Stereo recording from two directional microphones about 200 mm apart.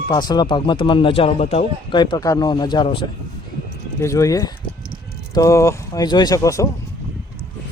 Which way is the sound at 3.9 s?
15° left (ahead or behind).